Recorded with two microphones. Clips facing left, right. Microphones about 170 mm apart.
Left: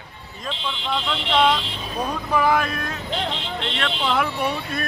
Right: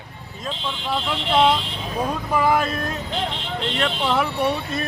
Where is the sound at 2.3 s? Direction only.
5° right (ahead or behind).